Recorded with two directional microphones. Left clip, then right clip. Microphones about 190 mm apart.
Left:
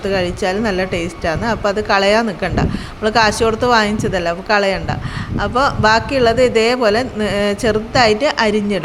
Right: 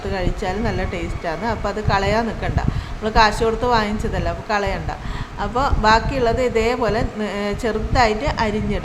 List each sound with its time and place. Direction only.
0.1 s a woman's voice: 15° left (ahead or behind)